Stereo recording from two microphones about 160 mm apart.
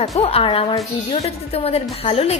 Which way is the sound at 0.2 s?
35° left (ahead or behind).